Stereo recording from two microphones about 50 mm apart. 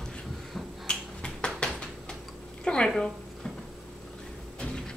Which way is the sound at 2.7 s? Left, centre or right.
Centre.